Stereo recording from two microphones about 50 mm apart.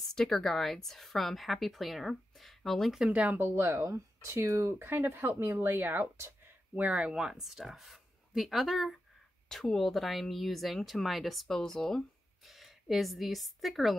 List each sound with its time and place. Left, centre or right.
0.1 s a woman's voice: centre
3.1 s speech: right
3.8 s speech: right
4.7 s speech: right
6.7 s a woman's voice: right; by 12.0 s centre
12.4 s speech: centre